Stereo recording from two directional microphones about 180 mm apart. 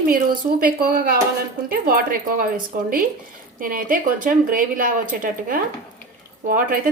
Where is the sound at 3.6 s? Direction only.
50° right (ahead or behind).